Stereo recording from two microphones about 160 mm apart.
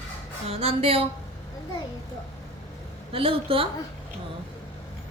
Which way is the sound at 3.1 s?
35° right (ahead or behind).